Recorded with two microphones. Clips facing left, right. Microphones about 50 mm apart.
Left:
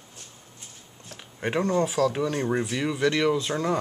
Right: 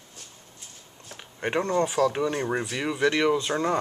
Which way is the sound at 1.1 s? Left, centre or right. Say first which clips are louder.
Even; centre.